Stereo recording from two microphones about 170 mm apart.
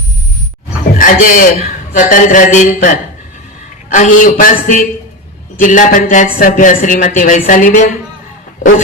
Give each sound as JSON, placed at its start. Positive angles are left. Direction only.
{"t": 0.9, "sound": "speech", "side_deg": 50}